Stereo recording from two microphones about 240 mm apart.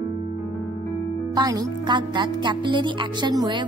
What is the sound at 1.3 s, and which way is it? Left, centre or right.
A woman's voice, centre.